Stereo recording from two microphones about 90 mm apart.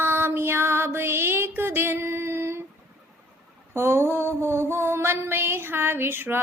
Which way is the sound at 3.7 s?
30° right (ahead or behind).